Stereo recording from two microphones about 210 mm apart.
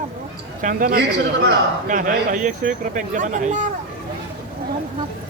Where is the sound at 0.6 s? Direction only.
40° right (ahead or behind).